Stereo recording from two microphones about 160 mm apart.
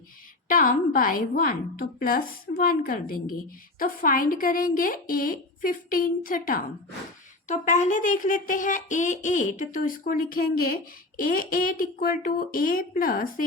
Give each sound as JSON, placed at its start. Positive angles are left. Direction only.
{"t": 0.4, "sound": "speech", "side_deg": 60}
{"t": 7.4, "sound": "speech", "side_deg": 50}